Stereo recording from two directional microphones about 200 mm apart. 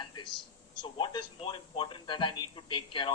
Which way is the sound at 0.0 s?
25° left (ahead or behind).